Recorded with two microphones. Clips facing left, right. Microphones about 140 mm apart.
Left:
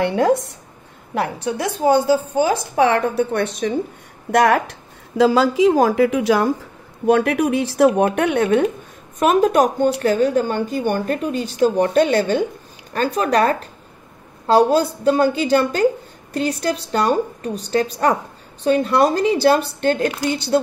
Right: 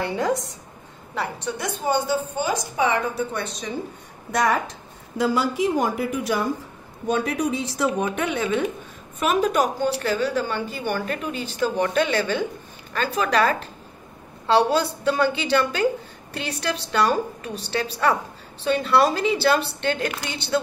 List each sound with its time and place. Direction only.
0.0 s a woman's voice: 70° left (ahead or behind); by 2.5 s 90° left
2.7 s a woman's voice: 75° left (ahead or behind)
7.1 s a woman's voice: 70° left (ahead or behind); by 20.2 s 45° left (ahead or behind)